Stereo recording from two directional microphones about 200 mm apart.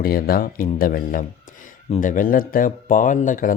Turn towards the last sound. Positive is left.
turn(degrees=40)  # may be behind; listen again after turning